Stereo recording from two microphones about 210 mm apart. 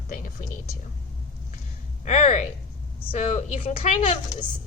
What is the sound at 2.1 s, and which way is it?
A woman's voice, 35° left (ahead or behind).